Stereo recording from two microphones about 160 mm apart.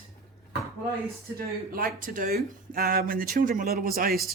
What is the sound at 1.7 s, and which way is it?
Speech, 65° right (ahead or behind).